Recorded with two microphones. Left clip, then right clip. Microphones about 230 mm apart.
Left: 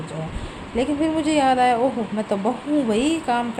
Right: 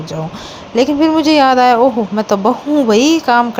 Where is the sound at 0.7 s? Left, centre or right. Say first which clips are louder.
Right 10 dB; right.